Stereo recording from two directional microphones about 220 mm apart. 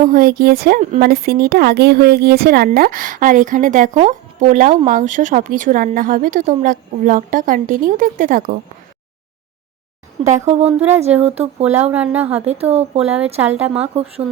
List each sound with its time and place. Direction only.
0.0 s a woman's voice: 40° right (ahead or behind)
10.2 s a woman's voice: 30° right (ahead or behind)
10.8 s a woman's voice: 10° right (ahead or behind)
11.2 s speech: 30° right (ahead or behind)
11.6 s a woman's voice: 5° right (ahead or behind)
12.5 s speech: 30° right (ahead or behind)